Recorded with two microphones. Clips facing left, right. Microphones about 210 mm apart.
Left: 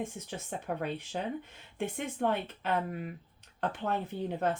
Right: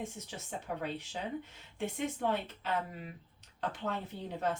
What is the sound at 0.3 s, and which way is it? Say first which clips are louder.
Speech: left 4 dB; 55° left (ahead or behind).